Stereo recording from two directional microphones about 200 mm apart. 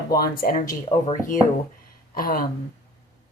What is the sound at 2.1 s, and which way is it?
Speech, 45° left (ahead or behind).